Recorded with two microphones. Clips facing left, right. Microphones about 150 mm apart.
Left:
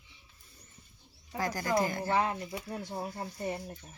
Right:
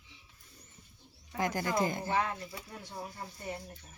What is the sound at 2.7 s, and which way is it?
Speech, 45° left (ahead or behind).